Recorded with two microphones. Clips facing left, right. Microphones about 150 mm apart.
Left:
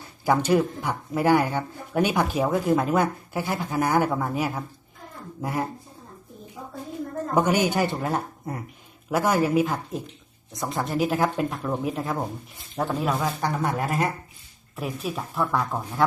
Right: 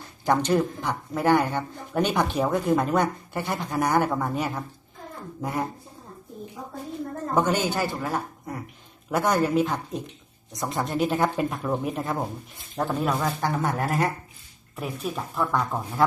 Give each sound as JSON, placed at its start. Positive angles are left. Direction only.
{"t": 0.3, "sound": "speech", "side_deg": 10}
{"t": 7.3, "sound": "a woman's voice", "side_deg": 15}
{"t": 9.0, "sound": "speech", "side_deg": 5}